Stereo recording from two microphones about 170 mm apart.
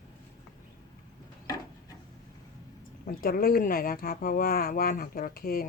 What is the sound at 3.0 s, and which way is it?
Speech, 60° left (ahead or behind).